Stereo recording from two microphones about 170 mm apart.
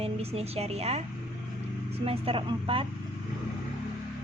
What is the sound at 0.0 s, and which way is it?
A woman's voice, 35° right (ahead or behind).